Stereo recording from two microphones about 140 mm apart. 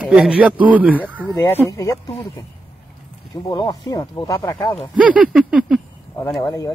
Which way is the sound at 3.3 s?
25° left (ahead or behind).